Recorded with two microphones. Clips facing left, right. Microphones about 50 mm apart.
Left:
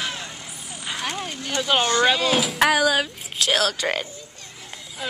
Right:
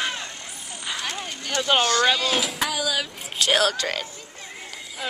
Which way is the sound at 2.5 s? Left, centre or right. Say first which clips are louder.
Left 8 dB; left.